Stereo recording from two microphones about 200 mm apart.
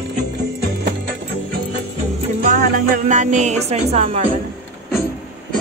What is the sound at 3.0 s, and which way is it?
Speech, 35° right (ahead or behind).